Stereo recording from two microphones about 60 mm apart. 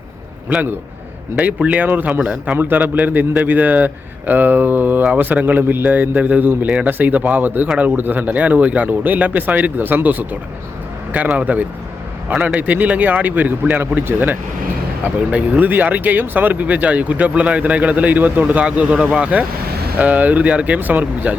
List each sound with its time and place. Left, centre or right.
1.4 s speech: right